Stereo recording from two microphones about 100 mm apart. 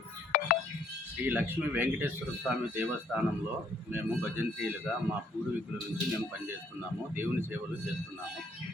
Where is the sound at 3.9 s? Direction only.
20° right (ahead or behind).